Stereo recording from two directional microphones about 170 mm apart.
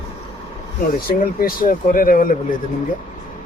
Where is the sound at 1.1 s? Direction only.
55° left (ahead or behind).